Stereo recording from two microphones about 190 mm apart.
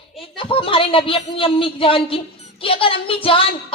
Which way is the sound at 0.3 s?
30° left (ahead or behind).